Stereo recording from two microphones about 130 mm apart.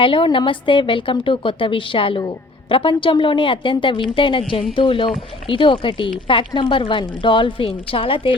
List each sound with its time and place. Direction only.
0.0 s a woman's voice: 40° left (ahead or behind)